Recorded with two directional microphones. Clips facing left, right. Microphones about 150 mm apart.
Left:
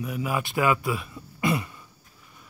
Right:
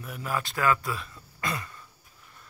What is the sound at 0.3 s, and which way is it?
Throat clearing, 15° left (ahead or behind).